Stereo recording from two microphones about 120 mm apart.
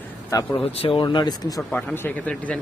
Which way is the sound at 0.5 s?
50° left (ahead or behind).